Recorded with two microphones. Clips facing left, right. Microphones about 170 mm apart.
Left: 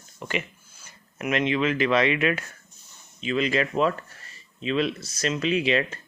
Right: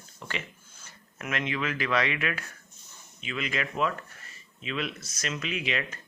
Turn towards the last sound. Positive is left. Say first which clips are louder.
# left 9 dB
turn(degrees=30)  # may be behind; listen again after turning